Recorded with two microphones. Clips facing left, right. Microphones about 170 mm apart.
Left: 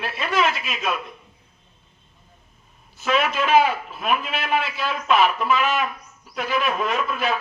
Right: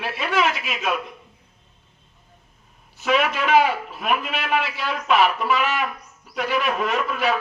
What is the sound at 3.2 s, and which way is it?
A man's voice, 15° right (ahead or behind).